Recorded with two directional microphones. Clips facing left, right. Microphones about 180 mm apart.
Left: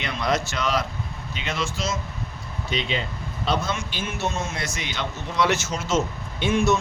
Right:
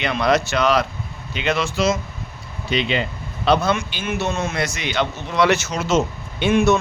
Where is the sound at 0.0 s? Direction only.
70° right (ahead or behind).